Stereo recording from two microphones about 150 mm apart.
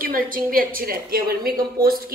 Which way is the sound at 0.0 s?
75° right (ahead or behind).